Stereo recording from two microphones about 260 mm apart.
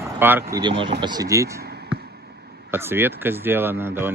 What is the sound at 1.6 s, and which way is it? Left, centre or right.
Basketball bounce, right.